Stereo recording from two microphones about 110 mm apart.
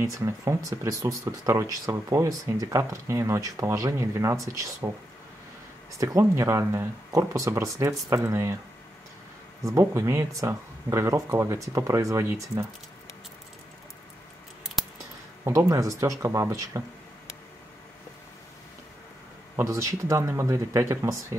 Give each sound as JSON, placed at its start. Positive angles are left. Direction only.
{"t": 0.0, "sound": "speech", "side_deg": -25}
{"t": 5.9, "sound": "speech", "side_deg": -30}
{"t": 9.7, "sound": "speech", "side_deg": -25}
{"t": 15.4, "sound": "speech", "side_deg": -25}
{"t": 19.5, "sound": "speech", "side_deg": -30}